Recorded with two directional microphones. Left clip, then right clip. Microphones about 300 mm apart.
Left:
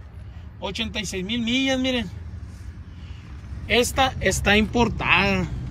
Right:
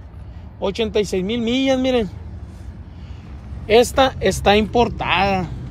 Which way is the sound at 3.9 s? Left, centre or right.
Centre.